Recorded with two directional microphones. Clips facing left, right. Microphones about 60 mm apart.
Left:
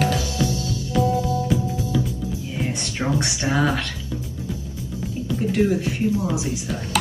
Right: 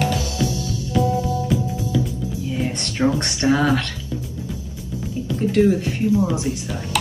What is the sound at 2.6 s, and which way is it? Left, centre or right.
Speech, centre.